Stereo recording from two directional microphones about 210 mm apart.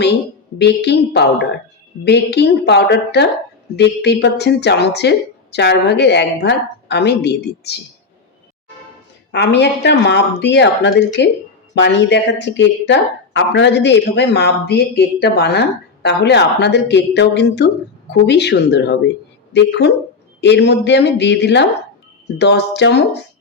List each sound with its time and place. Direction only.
0.6 s a woman's voice: 55° left (ahead or behind)
9.3 s a woman's voice: 55° left (ahead or behind)